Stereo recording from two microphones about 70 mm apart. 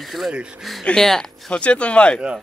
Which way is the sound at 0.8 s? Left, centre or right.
Centre.